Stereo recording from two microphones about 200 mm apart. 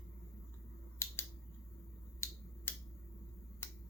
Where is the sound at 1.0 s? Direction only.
15° left (ahead or behind).